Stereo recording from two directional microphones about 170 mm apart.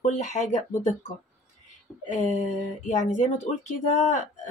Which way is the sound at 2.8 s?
45° left (ahead or behind).